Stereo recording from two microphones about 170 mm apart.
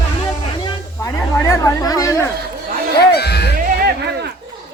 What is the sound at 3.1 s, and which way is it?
Speech, 70° left (ahead or behind).